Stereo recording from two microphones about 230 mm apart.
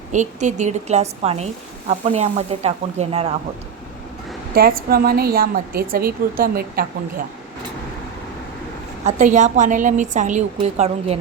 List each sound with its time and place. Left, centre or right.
0.1 s speech: right
4.5 s a woman's voice: right
9.0 s a woman's voice: right